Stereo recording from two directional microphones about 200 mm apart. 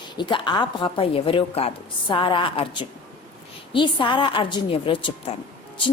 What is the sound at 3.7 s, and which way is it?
A woman's voice, 25° left (ahead or behind).